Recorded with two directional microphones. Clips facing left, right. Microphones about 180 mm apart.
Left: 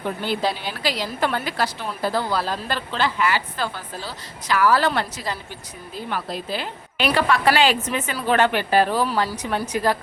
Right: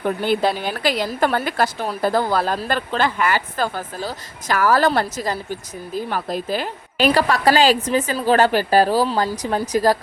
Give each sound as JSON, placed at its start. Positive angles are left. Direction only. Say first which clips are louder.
{"t": 0.0, "sound": "a woman's voice", "louder": "right 5 dB", "side_deg": -50}